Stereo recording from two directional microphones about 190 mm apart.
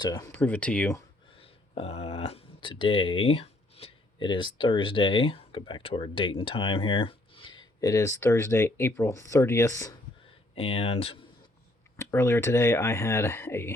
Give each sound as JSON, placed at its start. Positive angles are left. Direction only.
{"t": 0.0, "sound": "speech", "side_deg": 20}
{"t": 0.3, "sound": "speech", "side_deg": 10}
{"t": 1.4, "sound": "speech", "side_deg": 30}
{"t": 10.5, "sound": "speech", "side_deg": 30}
{"t": 11.9, "sound": "speech", "side_deg": 15}